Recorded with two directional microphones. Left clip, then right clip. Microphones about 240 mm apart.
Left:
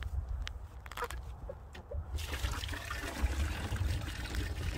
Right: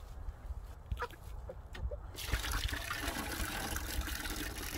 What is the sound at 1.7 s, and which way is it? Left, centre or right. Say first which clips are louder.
Toilet flush: right 1 dB; right.